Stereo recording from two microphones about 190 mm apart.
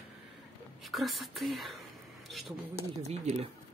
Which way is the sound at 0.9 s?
Centre (ahead or behind).